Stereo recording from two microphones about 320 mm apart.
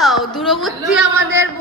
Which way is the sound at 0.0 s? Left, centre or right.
Centre.